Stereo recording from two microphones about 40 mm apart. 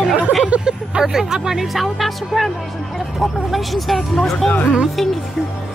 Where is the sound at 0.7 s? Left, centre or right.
Centre.